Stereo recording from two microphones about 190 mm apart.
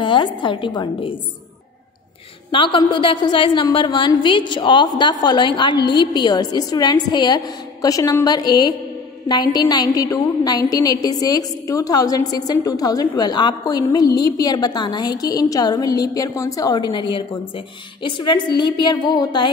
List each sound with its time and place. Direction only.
0.0 s a woman's voice: 25° left (ahead or behind)
2.5 s a woman's voice: 25° left (ahead or behind)